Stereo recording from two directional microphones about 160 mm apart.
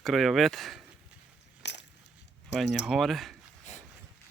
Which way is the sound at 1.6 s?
90° left.